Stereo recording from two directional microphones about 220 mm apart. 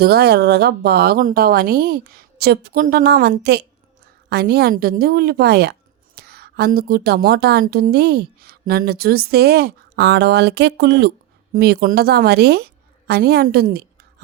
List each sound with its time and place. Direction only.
0.0 s a woman's voice: 45° right (ahead or behind)